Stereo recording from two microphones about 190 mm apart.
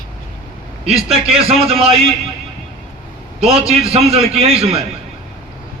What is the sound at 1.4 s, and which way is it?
Speech, 30° right (ahead or behind).